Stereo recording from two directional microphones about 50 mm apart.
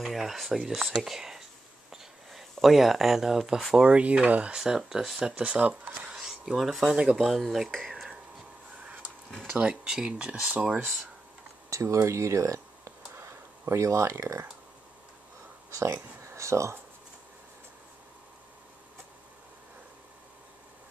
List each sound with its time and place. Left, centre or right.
0.0 s speech: centre
1.9 s a sound: centre
3.7 s speech: right
4.6 s speech: centre
9.6 s speech: centre
11.7 s a sound: right
15.7 s speech: right